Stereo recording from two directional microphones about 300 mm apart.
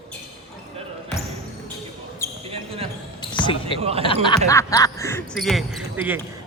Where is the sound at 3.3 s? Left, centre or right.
Centre.